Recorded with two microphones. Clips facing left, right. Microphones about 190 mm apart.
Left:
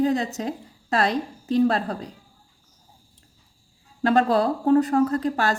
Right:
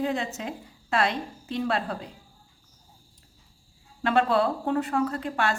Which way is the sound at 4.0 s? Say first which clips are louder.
Left 3 dB; 40° left (ahead or behind).